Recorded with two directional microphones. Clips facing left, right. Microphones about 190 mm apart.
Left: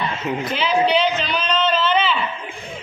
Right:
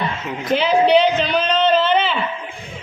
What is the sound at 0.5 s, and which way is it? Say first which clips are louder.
A man's voice: right 6 dB; 55° right (ahead or behind).